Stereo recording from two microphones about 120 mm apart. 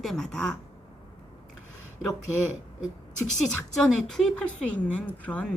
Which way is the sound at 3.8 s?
5° left (ahead or behind).